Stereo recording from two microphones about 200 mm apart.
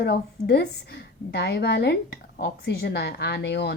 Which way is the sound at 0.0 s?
55° left (ahead or behind).